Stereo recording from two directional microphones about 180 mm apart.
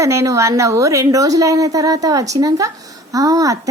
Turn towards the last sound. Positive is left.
turn(degrees=-20)  # may be behind; listen again after turning